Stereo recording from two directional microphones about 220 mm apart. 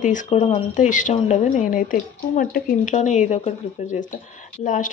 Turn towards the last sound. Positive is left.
turn(degrees=35)  # may be behind; listen again after turning